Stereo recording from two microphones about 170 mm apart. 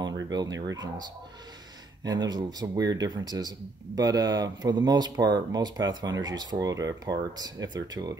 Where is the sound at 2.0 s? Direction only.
25° right (ahead or behind).